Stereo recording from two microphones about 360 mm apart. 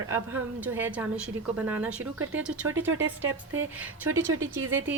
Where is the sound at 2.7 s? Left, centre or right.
Right.